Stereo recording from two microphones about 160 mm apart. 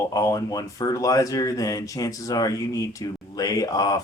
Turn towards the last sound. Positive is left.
turn(degrees=25)  # may be behind; listen again after turning